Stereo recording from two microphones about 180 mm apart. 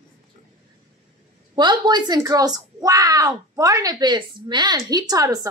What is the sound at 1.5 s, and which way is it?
Speech, 25° right (ahead or behind).